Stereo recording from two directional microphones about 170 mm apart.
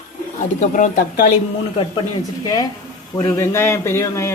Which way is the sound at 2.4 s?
25° left (ahead or behind).